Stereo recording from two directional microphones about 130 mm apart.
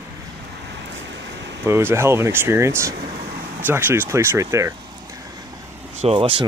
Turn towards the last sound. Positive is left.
turn(degrees=-40)  # may be behind; listen again after turning